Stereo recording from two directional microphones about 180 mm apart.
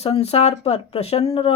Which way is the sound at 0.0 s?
35° left (ahead or behind).